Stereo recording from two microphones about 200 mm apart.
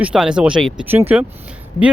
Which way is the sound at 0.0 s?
5° right (ahead or behind).